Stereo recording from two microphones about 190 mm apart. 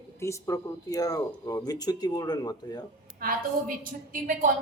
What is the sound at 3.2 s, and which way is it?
A woman's voice, 50° right (ahead or behind).